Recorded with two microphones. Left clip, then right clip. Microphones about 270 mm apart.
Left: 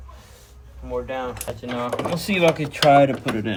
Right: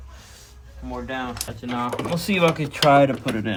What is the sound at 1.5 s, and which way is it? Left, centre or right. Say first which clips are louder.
Speech: left 1 dB; centre.